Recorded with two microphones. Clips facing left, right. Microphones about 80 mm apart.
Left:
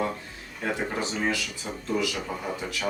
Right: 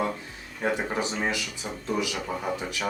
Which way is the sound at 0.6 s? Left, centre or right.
Centre.